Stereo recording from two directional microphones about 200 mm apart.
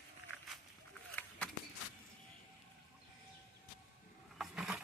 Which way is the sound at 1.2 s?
5° left (ahead or behind).